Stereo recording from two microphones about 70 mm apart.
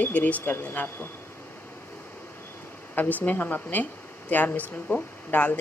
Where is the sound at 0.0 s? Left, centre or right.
Left.